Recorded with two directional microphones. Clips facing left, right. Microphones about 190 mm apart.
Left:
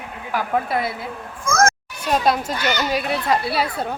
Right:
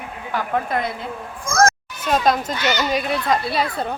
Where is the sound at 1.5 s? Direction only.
35° right (ahead or behind).